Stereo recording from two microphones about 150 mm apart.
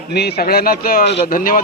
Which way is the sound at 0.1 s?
90° left.